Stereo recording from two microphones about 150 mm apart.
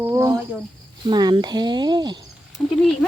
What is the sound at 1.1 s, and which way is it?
Speech, 30° right (ahead or behind).